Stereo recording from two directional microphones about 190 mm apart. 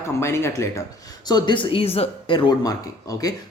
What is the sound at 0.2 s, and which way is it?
Speech, 15° left (ahead or behind).